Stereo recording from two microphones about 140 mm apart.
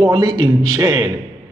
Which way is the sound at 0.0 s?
35° right (ahead or behind).